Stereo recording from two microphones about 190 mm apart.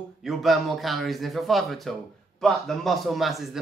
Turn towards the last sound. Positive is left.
turn(degrees=0)  # may be behind; listen again after turning